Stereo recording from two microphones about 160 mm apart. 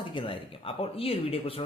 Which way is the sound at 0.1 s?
30° left (ahead or behind).